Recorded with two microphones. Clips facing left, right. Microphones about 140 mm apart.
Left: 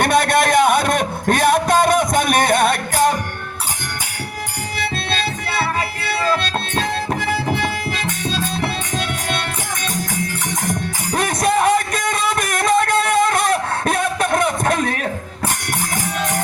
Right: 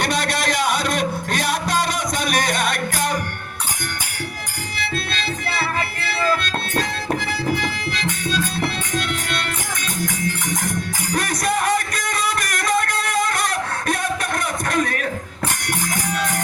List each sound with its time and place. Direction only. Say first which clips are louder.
0.0 s music: left 7 dB; 55° left (ahead or behind)
7.2 s music: left 2 dB; 55° left (ahead or behind)
11.3 s a sound: left 5 dB; 50° left (ahead or behind)